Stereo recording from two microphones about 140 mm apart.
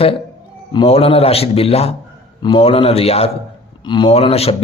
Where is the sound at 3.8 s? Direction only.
35° left (ahead or behind).